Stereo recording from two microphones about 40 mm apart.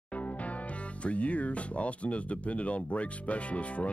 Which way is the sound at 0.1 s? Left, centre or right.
Left.